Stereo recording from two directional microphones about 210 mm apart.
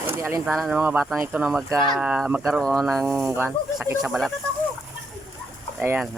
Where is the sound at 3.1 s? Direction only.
10° right (ahead or behind).